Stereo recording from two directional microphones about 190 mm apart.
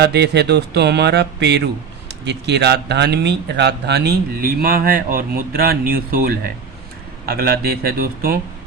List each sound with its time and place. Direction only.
0.0 s speech: 60° right (ahead or behind)